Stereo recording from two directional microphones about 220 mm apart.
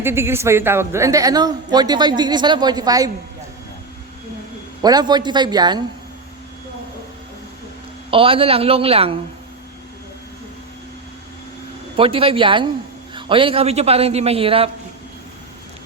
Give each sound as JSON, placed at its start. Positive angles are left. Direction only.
{"t": 0.0, "sound": "a man's voice", "side_deg": -10}
{"t": 4.8, "sound": "a man's voice", "side_deg": -20}
{"t": 8.1, "sound": "a man's voice", "side_deg": -25}
{"t": 11.9, "sound": "a man's voice", "side_deg": -25}